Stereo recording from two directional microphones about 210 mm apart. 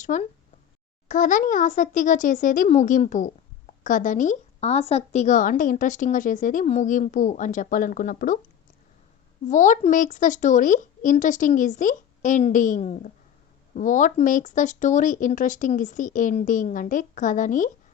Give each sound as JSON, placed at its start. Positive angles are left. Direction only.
{"t": 0.0, "sound": "a child's voice", "side_deg": 35}
{"t": 9.5, "sound": "a child's voice", "side_deg": 35}